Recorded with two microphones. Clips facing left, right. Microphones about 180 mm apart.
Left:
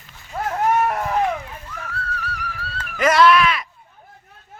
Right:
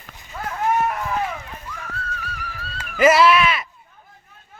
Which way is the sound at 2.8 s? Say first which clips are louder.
Right 1 dB; 5° right (ahead or behind).